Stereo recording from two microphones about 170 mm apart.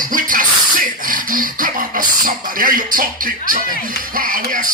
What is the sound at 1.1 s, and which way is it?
Speech, 55° right (ahead or behind).